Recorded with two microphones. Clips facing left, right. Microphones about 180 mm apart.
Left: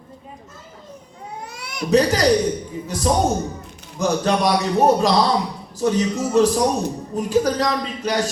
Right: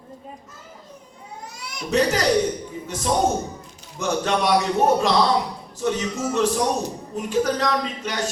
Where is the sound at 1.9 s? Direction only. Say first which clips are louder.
Left 4 dB; 35° left (ahead or behind).